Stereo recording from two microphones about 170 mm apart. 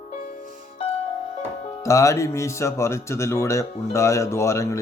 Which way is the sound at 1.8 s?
20° left (ahead or behind).